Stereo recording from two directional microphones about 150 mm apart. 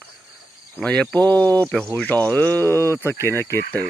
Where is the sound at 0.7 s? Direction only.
5° left (ahead or behind).